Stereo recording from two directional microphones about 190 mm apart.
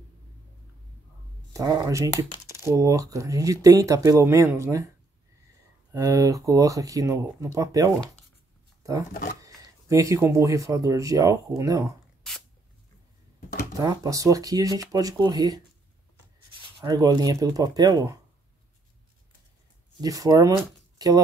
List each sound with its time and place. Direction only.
1.5 s speech: 15° right (ahead or behind)
5.9 s speech: 20° right (ahead or behind)
9.4 s speech: 15° right (ahead or behind)
12.2 s spray: centre (ahead or behind)
13.7 s speech: 20° right (ahead or behind)
16.8 s speech: 20° right (ahead or behind)
20.0 s speech: 20° right (ahead or behind)